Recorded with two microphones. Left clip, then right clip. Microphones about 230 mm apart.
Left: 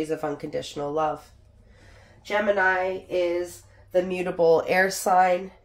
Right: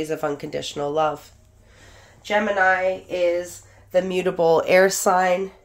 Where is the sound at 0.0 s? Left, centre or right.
Right.